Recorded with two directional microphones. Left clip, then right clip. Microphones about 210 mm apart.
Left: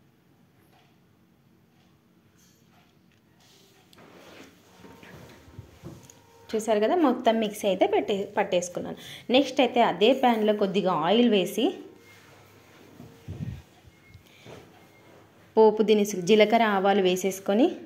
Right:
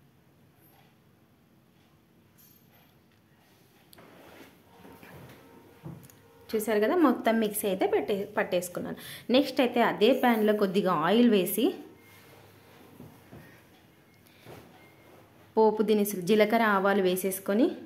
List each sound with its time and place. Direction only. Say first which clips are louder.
6.4 s a woman's voice: left 2 dB; centre (ahead or behind)
15.5 s a woman's voice: left 4 dB; 5° left (ahead or behind)